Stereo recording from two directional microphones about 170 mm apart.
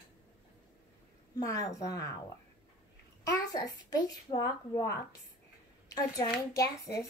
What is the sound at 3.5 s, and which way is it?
A woman's voice, 20° left (ahead or behind).